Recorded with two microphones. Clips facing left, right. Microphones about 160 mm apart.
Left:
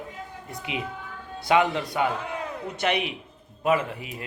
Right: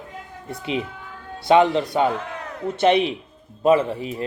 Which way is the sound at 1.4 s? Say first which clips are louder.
Right 6 dB; 25° right (ahead or behind).